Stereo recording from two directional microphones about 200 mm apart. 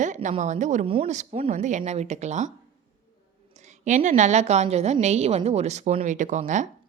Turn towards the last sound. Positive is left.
turn(degrees=-40)  # may be behind; listen again after turning